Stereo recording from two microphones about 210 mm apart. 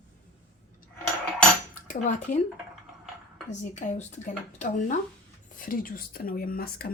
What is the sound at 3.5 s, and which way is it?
Speech, 35° left (ahead or behind).